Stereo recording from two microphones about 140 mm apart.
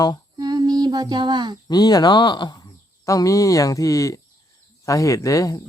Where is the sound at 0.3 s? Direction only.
30° right (ahead or behind).